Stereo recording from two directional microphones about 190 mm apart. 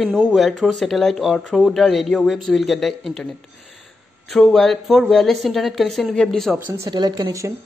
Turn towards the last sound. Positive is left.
turn(degrees=-20)  # may be behind; listen again after turning